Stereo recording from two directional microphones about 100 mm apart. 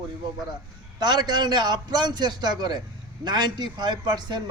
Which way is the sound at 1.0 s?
45° right (ahead or behind).